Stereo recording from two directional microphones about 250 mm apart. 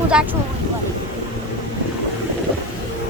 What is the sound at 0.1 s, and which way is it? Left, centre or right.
Speech, centre.